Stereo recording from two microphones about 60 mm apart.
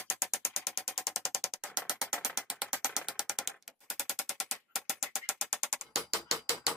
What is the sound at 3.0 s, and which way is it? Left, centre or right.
Ratchet, centre.